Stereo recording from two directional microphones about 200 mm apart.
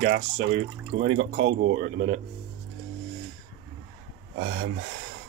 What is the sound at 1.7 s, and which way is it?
Speech, 40° right (ahead or behind).